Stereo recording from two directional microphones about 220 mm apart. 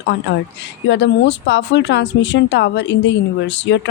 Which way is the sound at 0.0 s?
50° left (ahead or behind).